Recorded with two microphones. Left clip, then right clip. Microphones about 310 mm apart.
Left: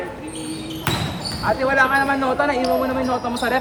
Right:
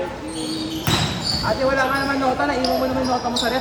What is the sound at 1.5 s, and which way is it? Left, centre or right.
Basketball bounce, left.